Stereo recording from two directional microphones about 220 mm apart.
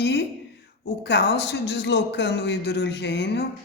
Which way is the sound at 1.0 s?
50° left (ahead or behind).